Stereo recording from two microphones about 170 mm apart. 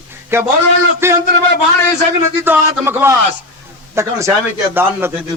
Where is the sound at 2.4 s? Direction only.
15° right (ahead or behind).